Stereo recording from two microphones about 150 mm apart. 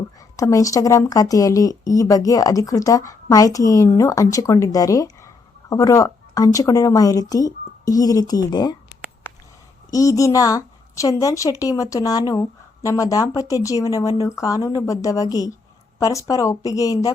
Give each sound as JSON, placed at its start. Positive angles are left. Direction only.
{"t": 0.3, "sound": "a woman's voice", "side_deg": 20}
{"t": 9.9, "sound": "a woman's voice", "side_deg": 20}